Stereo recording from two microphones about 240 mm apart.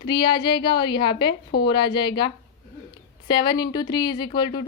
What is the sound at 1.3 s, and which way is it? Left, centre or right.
Speech, left.